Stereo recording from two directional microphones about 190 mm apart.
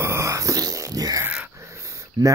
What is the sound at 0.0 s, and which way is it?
Dog, 15° right (ahead or behind).